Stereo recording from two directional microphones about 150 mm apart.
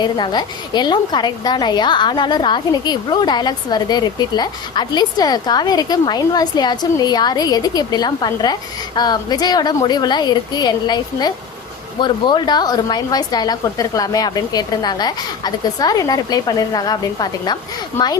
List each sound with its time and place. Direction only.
0.0 s a woman's voice: 30° left (ahead or behind)